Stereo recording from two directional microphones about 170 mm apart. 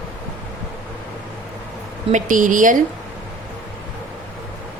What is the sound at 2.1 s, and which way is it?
Speech, 50° right (ahead or behind).